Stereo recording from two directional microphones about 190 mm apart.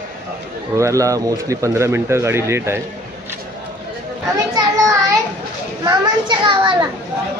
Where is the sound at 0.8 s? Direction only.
15° right (ahead or behind).